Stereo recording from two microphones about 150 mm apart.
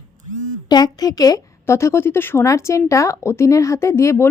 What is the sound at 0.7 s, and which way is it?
A woman's voice, 25° left (ahead or behind).